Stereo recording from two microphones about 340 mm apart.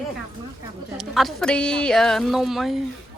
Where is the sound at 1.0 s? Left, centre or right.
Centre.